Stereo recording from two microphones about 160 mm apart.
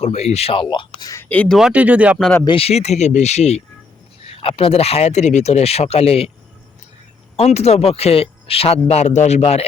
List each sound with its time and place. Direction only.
0.0 s speech: 40° left (ahead or behind); by 1.5 s 10° left (ahead or behind)
1.5 s speech: 5° right (ahead or behind)
2.1 s speech: 5° left (ahead or behind)
2.4 s speech: 35° left (ahead or behind)
7.3 s speech: 40° left (ahead or behind)